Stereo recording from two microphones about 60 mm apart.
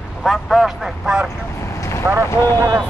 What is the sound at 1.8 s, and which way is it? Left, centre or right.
Vehicle, left.